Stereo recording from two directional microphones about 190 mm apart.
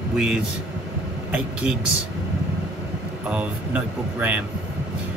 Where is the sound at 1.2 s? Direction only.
5° right (ahead or behind).